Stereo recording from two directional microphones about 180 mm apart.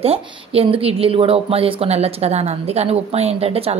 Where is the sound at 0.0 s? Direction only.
35° right (ahead or behind).